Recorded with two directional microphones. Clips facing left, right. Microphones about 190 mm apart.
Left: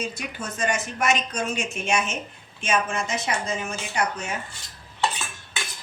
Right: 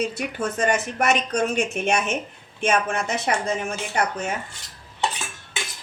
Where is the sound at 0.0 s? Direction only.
60° right (ahead or behind).